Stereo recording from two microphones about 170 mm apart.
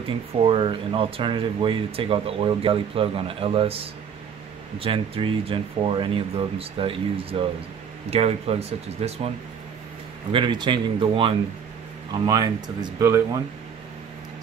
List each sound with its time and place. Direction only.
0.4 s speech: 30° right (ahead or behind)
10.3 s speech: 25° right (ahead or behind)